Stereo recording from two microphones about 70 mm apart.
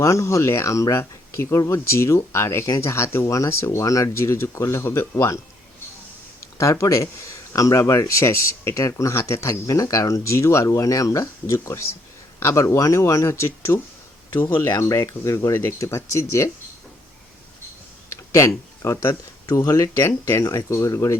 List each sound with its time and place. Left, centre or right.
0.0 s speech: left
6.6 s speech: left
18.1 s speech: left
19.5 s speech: left